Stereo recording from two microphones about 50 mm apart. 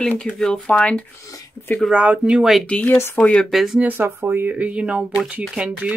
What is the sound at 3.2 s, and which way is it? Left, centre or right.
Speech, left.